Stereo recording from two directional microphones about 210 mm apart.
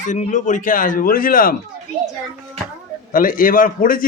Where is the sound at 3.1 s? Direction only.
40° left (ahead or behind).